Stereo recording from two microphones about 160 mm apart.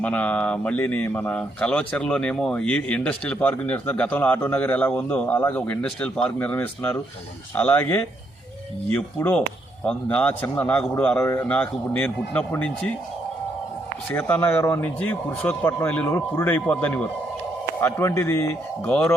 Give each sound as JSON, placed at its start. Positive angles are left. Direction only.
{"t": 0.0, "sound": "speech", "side_deg": 10}
{"t": 14.1, "sound": "speech", "side_deg": 10}
{"t": 18.9, "sound": "speech", "side_deg": 5}